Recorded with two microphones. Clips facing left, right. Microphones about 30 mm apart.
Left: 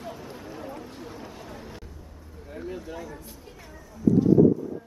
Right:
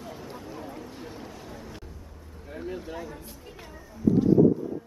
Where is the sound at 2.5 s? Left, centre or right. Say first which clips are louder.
Even; centre.